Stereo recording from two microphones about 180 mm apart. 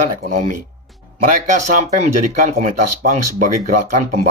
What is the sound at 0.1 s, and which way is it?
Speech, 45° right (ahead or behind).